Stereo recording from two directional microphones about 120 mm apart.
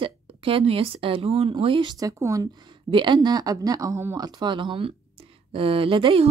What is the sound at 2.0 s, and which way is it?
A woman's voice, 25° right (ahead or behind).